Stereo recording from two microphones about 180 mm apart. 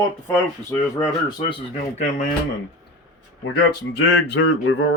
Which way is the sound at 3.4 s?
75° left (ahead or behind).